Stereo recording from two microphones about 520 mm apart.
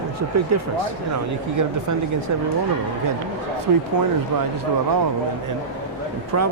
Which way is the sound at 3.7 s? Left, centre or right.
Right.